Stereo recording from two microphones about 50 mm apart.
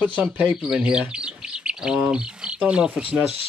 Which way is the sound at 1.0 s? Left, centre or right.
Centre.